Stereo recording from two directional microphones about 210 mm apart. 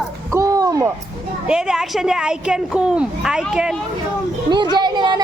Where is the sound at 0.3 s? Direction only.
15° right (ahead or behind).